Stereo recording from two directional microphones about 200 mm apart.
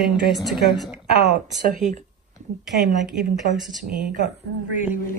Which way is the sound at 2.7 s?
Centre (ahead or behind).